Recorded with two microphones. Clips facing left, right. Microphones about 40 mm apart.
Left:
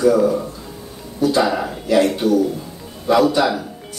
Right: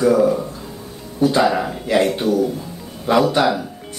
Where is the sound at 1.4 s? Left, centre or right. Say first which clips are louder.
Right 2 dB; centre.